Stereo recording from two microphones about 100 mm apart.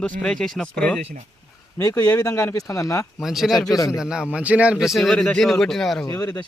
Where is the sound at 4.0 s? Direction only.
5° right (ahead or behind).